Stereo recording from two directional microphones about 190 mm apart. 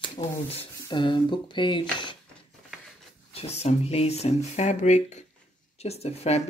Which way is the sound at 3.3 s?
35° left (ahead or behind).